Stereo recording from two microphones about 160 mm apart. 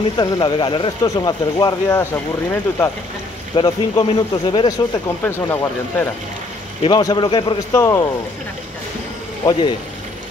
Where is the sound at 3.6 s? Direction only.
25° left (ahead or behind).